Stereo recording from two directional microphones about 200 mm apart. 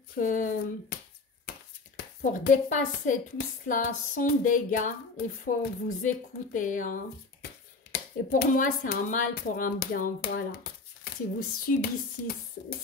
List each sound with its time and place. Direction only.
0.2 s speech: 40° left (ahead or behind)
2.3 s speech: 40° left (ahead or behind)